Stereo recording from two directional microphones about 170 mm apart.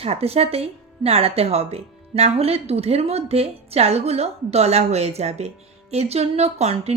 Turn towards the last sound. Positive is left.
turn(degrees=-40)  # may be behind; listen again after turning